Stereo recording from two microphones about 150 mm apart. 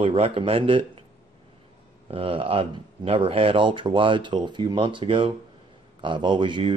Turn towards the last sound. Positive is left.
turn(degrees=-30)  # may be behind; listen again after turning